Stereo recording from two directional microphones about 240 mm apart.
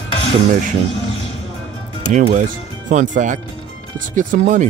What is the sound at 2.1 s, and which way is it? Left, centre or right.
Speech, right.